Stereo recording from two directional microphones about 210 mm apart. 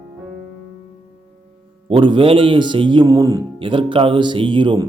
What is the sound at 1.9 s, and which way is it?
A man's voice, 25° right (ahead or behind).